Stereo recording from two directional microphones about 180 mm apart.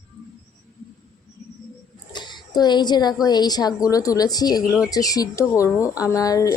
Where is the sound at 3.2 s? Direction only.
20° left (ahead or behind).